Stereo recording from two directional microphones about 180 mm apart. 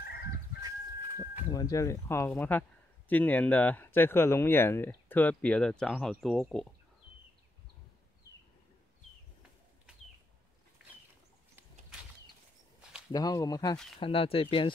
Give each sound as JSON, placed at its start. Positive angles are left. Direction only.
{"t": 0.6, "sound": "livestock", "side_deg": -20}
{"t": 1.5, "sound": "speech", "side_deg": 20}
{"t": 13.1, "sound": "speech", "side_deg": 20}